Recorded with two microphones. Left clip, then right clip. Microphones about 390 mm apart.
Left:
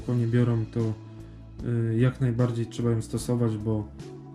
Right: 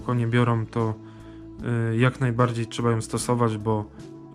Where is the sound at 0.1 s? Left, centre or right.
Centre.